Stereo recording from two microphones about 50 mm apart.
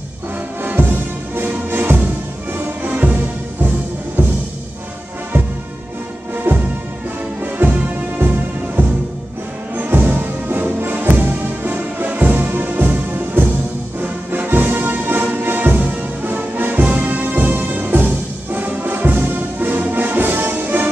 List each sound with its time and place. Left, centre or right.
0.6 s music: right
2.9 s music: right
4.2 s music: right
7.6 s music: right
8.8 s music: right